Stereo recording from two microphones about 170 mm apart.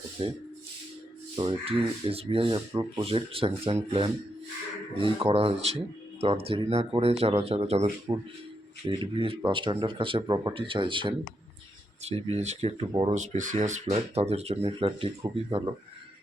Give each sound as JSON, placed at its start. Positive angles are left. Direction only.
{"t": 0.2, "sound": "speech", "side_deg": -30}
{"t": 1.4, "sound": "speech", "side_deg": -30}
{"t": 12.9, "sound": "speech", "side_deg": -25}
{"t": 13.1, "sound": "speech", "side_deg": -45}